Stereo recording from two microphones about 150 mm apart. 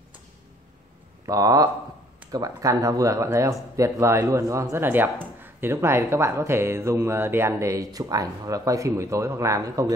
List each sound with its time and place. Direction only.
1.2 s speech: 25° right (ahead or behind)